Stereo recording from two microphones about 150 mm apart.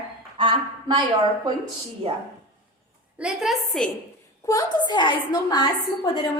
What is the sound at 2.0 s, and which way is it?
Speech, 35° right (ahead or behind).